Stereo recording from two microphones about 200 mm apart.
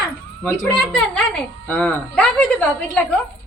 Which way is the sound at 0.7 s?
5° left (ahead or behind).